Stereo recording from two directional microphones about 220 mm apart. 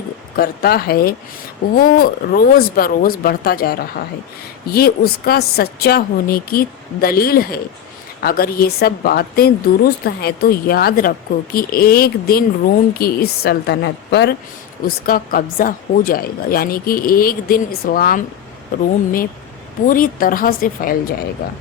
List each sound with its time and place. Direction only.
0.3 s a woman's voice: 45° left (ahead or behind)
19.9 s speech: 40° left (ahead or behind)